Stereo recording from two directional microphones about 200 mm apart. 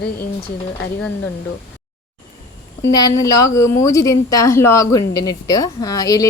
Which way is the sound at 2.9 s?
20° left (ahead or behind).